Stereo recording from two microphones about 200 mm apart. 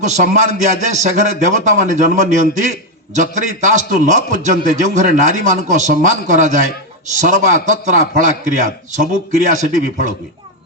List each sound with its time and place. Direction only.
0.0 s a man's voice: 35° right (ahead or behind)